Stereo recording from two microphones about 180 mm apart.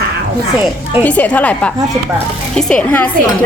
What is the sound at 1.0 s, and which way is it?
A woman's voice, 10° left (ahead or behind).